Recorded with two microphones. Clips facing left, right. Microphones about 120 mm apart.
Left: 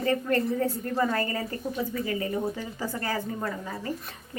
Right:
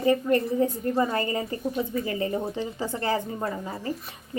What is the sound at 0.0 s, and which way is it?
A woman's voice, 15° right (ahead or behind).